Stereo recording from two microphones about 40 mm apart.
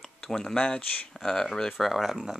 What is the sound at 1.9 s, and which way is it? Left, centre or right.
Speech, centre.